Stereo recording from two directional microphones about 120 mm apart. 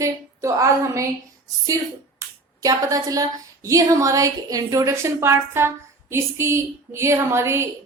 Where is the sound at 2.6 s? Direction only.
30° right (ahead or behind).